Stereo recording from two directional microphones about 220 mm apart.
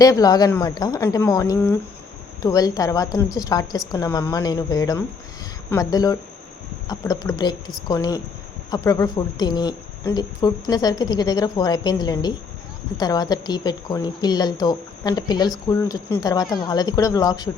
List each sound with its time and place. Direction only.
0.0 s a woman's voice: 15° left (ahead or behind)